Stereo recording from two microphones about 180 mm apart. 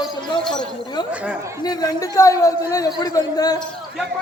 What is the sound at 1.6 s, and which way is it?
A man's voice, 20° left (ahead or behind).